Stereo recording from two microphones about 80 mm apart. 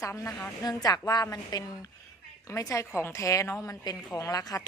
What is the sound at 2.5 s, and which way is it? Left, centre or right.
A woman's voice, left.